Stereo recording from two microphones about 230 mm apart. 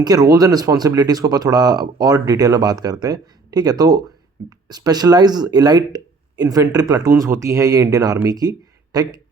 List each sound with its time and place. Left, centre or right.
0.0 s speech: centre